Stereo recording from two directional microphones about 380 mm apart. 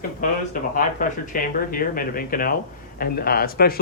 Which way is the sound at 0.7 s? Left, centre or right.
Left.